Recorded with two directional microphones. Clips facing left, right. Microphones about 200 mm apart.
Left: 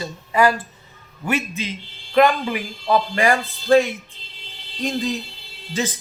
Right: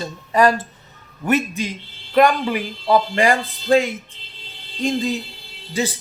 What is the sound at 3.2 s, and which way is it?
Speech, 15° right (ahead or behind).